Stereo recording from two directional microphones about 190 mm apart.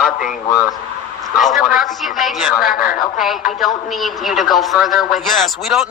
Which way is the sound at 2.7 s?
50° left (ahead or behind).